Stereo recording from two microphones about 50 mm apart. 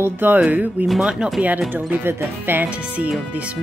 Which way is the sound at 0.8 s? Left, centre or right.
Right.